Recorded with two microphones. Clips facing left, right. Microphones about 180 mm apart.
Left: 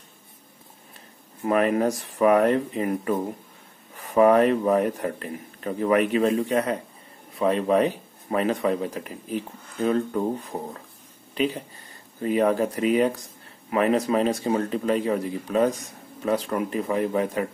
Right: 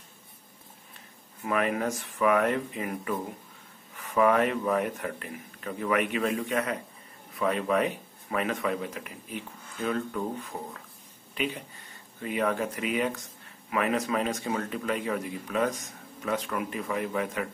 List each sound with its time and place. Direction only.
1.4 s speech: 35° left (ahead or behind)
11.3 s speech: 35° left (ahead or behind)